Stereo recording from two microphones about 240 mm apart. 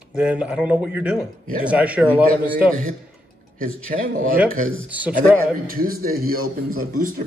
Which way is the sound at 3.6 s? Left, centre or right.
Right.